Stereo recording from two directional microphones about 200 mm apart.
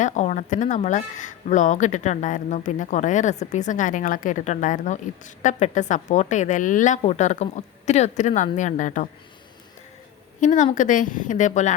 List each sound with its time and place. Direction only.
0.0 s speech: 40° left (ahead or behind)
10.4 s speech: 40° left (ahead or behind)